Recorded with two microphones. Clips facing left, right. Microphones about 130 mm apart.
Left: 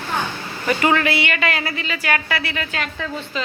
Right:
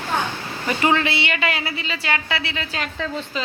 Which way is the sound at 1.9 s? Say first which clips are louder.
Left 2 dB; 20° right (ahead or behind).